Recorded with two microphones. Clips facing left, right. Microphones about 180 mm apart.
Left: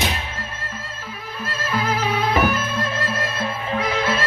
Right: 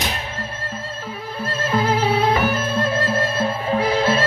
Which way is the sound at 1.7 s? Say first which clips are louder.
Right 4 dB; 30° right (ahead or behind).